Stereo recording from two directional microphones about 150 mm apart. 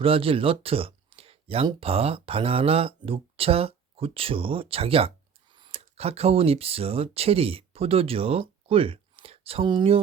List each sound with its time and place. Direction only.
0.0 s speech: 40° right (ahead or behind)